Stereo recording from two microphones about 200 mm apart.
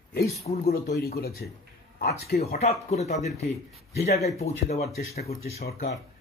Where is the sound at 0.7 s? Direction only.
50° left (ahead or behind).